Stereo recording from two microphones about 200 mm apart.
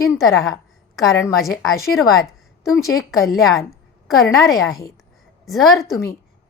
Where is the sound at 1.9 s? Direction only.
Centre (ahead or behind).